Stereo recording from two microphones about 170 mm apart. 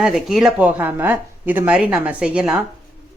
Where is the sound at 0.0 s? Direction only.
5° right (ahead or behind).